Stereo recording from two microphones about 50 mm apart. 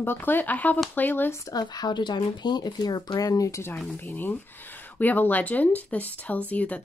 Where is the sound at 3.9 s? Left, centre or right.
Left.